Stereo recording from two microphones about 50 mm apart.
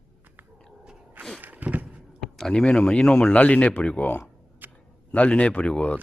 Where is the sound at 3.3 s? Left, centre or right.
Left.